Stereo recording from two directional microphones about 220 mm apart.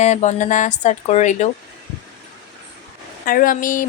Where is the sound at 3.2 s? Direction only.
40° left (ahead or behind).